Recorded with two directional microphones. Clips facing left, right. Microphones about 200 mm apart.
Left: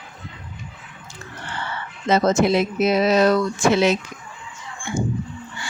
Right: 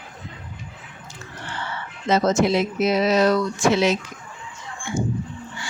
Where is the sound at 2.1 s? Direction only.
55° left (ahead or behind).